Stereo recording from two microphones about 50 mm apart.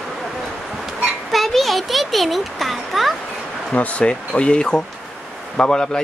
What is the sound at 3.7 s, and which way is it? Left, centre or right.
Speech, left.